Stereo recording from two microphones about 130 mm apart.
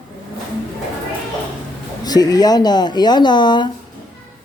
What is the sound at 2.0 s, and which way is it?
Speech, 30° left (ahead or behind).